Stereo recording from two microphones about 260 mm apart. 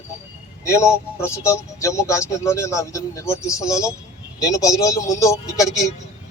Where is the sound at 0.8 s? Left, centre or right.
Centre.